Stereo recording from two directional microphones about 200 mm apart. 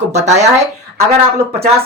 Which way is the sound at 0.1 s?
35° right (ahead or behind).